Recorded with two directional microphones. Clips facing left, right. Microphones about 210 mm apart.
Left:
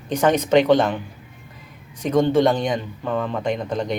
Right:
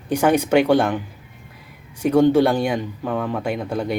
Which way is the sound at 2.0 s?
10° right (ahead or behind).